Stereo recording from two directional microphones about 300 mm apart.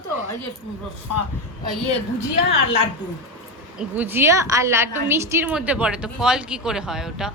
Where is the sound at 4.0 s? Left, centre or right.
Centre.